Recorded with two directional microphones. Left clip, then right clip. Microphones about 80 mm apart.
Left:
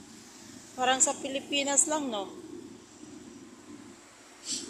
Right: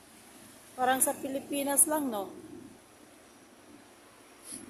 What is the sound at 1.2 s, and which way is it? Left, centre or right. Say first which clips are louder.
Speech: left 2 dB; right.